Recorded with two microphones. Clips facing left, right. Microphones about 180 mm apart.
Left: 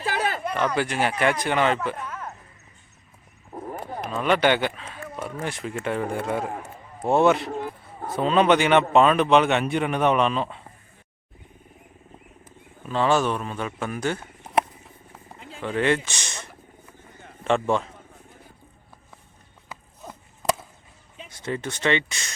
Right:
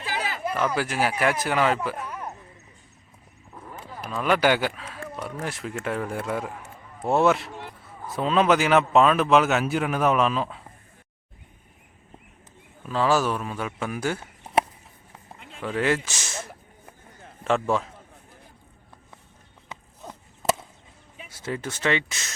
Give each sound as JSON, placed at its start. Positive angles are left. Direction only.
{"t": 0.0, "sound": "a sound", "side_deg": 55}
{"t": 0.4, "sound": "speech", "side_deg": -5}
{"t": 3.5, "sound": "wild animals", "side_deg": 45}
{"t": 4.1, "sound": "speech", "side_deg": 0}
{"t": 6.4, "sound": "speech", "side_deg": 55}
{"t": 7.1, "sound": "speech", "side_deg": 0}
{"t": 12.8, "sound": "speech", "side_deg": 0}
{"t": 15.4, "sound": "a sound", "side_deg": 0}
{"t": 17.2, "sound": "a man's voice", "side_deg": 0}
{"t": 19.7, "sound": "a sound", "side_deg": 0}
{"t": 21.2, "sound": "speech", "side_deg": -5}